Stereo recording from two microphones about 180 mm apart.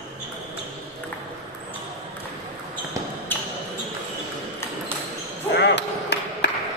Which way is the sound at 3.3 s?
10° left (ahead or behind).